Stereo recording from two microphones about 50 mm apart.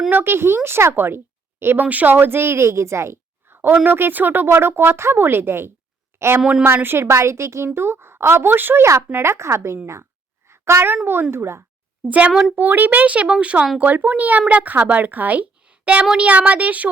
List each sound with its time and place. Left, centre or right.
0.1 s speech: right
1.8 s a woman's voice: right
3.8 s speech: right
4.5 s a woman's voice: right
7.1 s a woman's voice: right
8.5 s speech: right
8.8 s a woman's voice: right
10.5 s a sound: right
11.0 s speech: right
12.0 s speech: right